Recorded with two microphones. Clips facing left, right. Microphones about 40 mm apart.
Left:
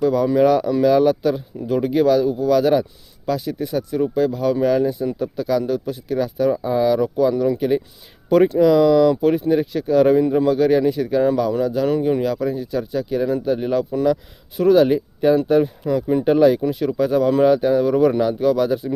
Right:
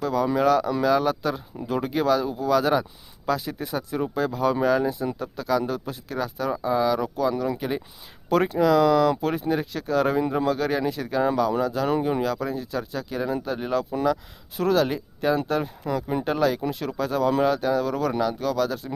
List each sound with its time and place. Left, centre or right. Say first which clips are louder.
0.0 s speech: left 6 dB; centre